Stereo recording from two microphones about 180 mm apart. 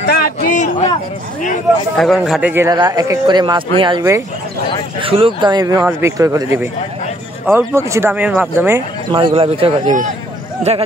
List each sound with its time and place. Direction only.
0.0 s a sound: 60° left (ahead or behind)
2.0 s a man's voice: centre (ahead or behind)
2.5 s speech: 20° right (ahead or behind)
9.1 s speech: 30° right (ahead or behind)